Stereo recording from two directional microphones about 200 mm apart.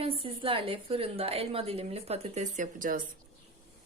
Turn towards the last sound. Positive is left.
turn(degrees=-45)  # may be behind; listen again after turning